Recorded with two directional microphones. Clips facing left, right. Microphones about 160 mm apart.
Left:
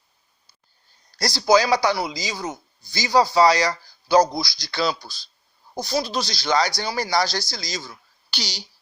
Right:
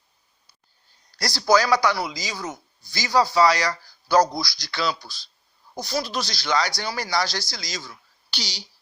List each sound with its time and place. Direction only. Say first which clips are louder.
1.2 s a man's voice: left 2 dB; 25° left (ahead or behind)
4.7 s speech: left 3 dB; 35° left (ahead or behind)
5.7 s a man's voice: left 3 dB; 25° left (ahead or behind)
6.7 s speech: left 3 dB; 25° left (ahead or behind)
8.3 s speech: left 2 dB; 50° left (ahead or behind)